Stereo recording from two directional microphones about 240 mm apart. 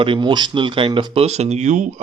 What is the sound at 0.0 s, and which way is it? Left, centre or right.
Speech, right.